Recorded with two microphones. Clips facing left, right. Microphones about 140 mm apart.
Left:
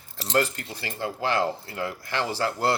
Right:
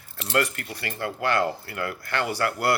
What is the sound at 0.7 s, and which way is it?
Speech, 60° right (ahead or behind).